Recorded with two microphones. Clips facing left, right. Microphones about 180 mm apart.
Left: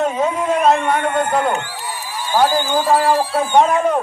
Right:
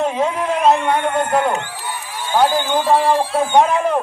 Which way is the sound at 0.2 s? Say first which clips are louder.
Left 1 dB; centre (ahead or behind).